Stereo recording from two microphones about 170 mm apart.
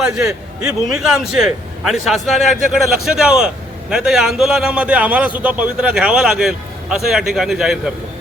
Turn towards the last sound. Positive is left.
turn(degrees=0)  # may be behind; listen again after turning